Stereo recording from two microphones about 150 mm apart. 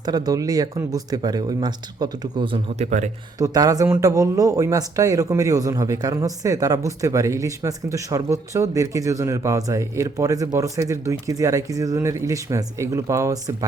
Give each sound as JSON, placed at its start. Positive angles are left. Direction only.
{"t": 0.0, "sound": "speech", "side_deg": -25}
{"t": 2.7, "sound": "a man's voice", "side_deg": -50}
{"t": 3.3, "sound": "speech", "side_deg": -25}